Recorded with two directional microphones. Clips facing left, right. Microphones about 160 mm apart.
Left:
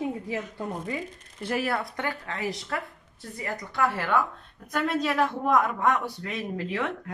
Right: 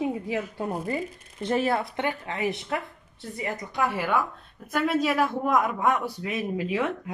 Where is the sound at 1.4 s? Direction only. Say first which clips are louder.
Right 3 dB; 25° right (ahead or behind).